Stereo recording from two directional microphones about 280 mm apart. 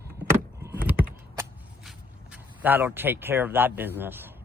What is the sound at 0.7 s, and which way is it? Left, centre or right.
Typing, centre.